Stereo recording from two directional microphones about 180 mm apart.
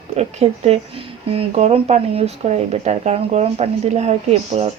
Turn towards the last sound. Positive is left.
turn(degrees=-35)  # may be behind; listen again after turning